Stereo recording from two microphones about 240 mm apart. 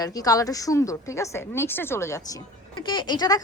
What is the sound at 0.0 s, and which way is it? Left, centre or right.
Speech, centre.